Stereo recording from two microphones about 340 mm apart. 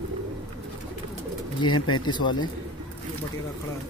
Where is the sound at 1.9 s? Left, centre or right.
Centre.